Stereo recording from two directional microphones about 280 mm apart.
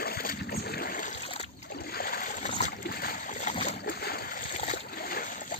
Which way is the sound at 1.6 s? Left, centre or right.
Left.